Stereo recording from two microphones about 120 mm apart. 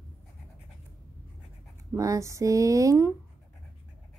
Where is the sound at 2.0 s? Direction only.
25° right (ahead or behind).